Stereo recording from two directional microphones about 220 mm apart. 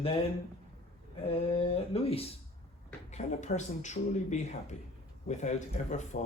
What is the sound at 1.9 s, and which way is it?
Speech, 25° left (ahead or behind).